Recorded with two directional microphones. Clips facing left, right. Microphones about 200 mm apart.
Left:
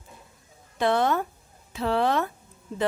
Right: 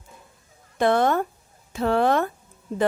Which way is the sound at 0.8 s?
50° right (ahead or behind).